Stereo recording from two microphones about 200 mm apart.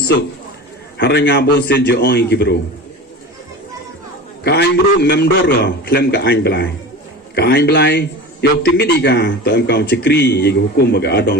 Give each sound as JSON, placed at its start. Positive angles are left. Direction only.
{"t": 0.9, "sound": "a man's voice", "side_deg": 55}
{"t": 4.4, "sound": "a man's voice", "side_deg": 55}